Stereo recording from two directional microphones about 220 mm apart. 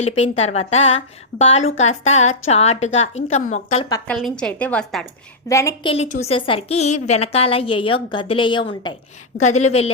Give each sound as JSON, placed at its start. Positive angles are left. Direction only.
{"t": 0.0, "sound": "a woman's voice", "side_deg": 30}
{"t": 4.0, "sound": "a woman's voice", "side_deg": 5}
{"t": 5.5, "sound": "a woman's voice", "side_deg": 15}
{"t": 5.9, "sound": "a woman's voice", "side_deg": 30}
{"t": 9.4, "sound": "speech", "side_deg": 30}